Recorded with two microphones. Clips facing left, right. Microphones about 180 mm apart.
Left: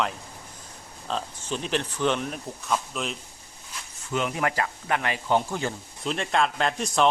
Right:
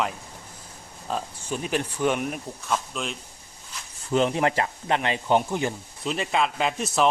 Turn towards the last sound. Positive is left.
turn(degrees=-5)  # may be behind; listen again after turning